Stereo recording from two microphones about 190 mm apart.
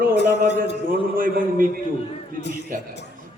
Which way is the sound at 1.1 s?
45° right (ahead or behind).